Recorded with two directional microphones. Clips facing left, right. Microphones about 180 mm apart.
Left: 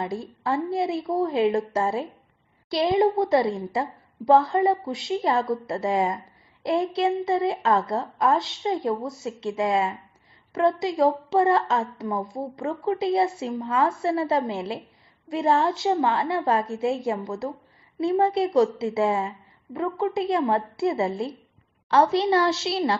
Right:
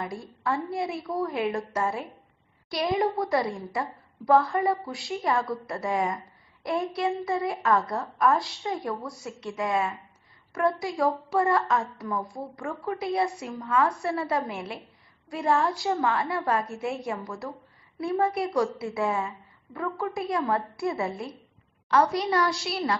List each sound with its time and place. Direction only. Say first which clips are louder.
0.0 s a woman's voice: left 3 dB; 25° left (ahead or behind)